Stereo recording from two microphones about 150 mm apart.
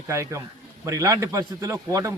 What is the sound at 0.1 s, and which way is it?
A man's voice, 20° right (ahead or behind).